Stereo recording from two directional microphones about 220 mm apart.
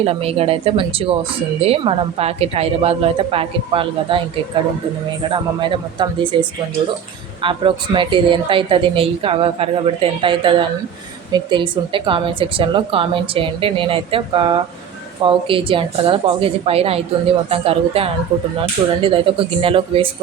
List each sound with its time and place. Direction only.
0.0 s a woman's voice: 25° right (ahead or behind)
5.3 s a woman's voice: 20° right (ahead or behind)